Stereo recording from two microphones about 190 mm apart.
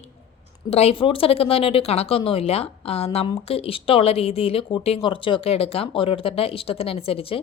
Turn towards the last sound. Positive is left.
turn(degrees=30)  # may be behind; listen again after turning